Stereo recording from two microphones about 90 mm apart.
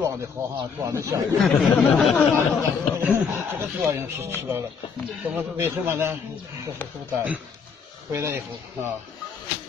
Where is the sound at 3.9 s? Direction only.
30° right (ahead or behind).